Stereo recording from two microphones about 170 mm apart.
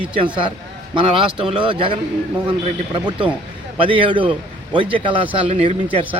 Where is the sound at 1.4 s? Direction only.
30° right (ahead or behind).